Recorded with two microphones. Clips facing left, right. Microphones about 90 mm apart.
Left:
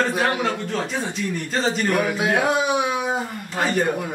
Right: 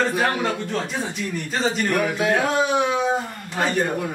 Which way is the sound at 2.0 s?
15° left (ahead or behind).